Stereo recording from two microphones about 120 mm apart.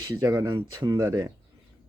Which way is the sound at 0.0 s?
30° right (ahead or behind).